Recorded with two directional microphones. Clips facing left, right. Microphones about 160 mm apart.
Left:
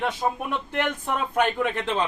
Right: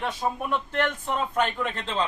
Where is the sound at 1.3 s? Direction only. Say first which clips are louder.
Left 3 dB; 15° left (ahead or behind).